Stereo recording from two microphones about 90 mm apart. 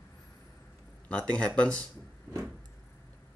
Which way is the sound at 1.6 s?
10° left (ahead or behind).